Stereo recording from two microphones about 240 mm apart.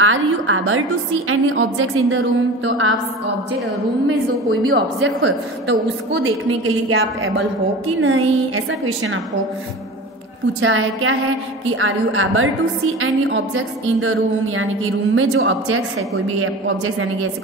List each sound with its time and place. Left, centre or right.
0.0 s a woman's voice: right
4.5 s a woman's voice: right
10.6 s a woman's voice: right